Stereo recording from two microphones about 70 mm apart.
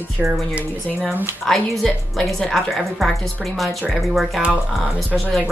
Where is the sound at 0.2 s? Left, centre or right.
Centre.